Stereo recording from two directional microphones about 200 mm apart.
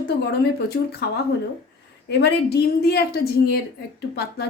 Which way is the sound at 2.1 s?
55° left (ahead or behind).